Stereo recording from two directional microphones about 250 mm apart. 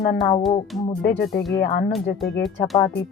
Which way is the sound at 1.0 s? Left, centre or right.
Left.